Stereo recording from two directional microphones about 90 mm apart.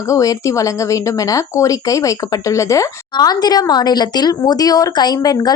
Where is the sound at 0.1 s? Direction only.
40° left (ahead or behind).